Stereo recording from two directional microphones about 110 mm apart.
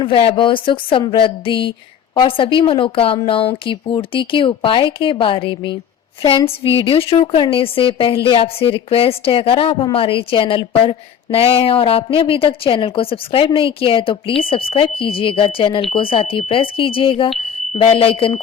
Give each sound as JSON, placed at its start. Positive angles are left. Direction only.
{"t": 0.0, "sound": "a woman's voice", "side_deg": 55}